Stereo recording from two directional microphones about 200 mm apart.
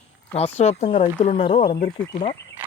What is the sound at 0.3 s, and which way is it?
Speech, 30° left (ahead or behind).